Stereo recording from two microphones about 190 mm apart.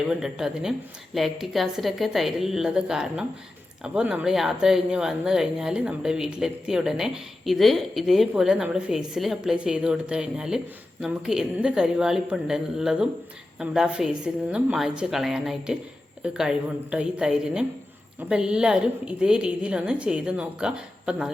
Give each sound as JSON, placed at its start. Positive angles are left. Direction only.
{"t": 0.1, "sound": "speech", "side_deg": -5}